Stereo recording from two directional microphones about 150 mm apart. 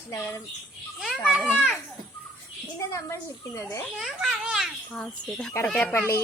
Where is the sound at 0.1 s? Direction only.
20° left (ahead or behind).